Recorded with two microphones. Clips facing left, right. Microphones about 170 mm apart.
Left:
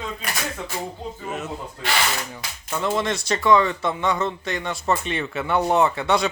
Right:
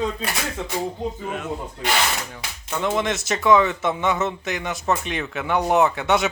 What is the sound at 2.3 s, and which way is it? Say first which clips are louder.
Speech: even; centre (ahead or behind).